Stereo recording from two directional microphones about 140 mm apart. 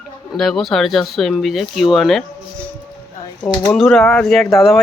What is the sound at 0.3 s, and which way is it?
Speech, 5° left (ahead or behind).